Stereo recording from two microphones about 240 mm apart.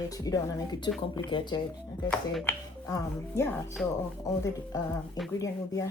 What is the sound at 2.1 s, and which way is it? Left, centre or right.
Speech, centre.